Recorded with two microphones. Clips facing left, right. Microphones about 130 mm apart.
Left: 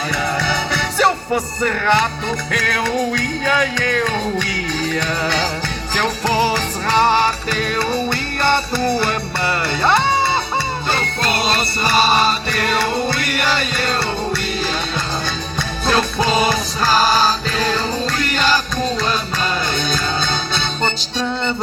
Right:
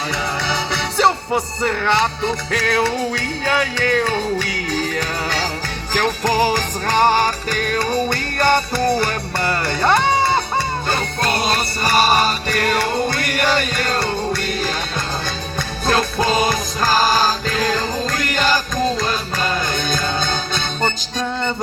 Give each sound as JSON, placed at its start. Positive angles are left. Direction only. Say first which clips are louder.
{"t": 0.3, "sound": "music", "louder": "left 2 dB", "side_deg": -25}
{"t": 5.9, "sound": "music", "louder": "right 1 dB", "side_deg": -40}
{"t": 15.5, "sound": "music", "louder": "even", "side_deg": -45}